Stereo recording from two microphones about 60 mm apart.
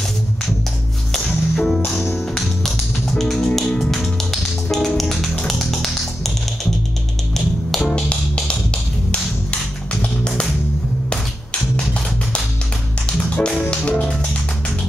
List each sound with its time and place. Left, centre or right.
1.1 s music: centre
2.3 s music: centre
7.9 s music: centre
13.5 s music: centre